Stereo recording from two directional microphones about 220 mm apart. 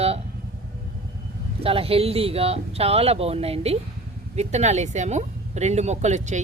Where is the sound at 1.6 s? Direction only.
25° right (ahead or behind).